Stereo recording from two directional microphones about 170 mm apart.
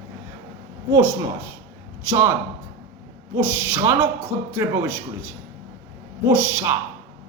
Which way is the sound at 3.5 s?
10° right (ahead or behind).